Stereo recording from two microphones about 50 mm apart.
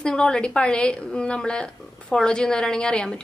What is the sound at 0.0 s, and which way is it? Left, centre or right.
A woman's voice, centre.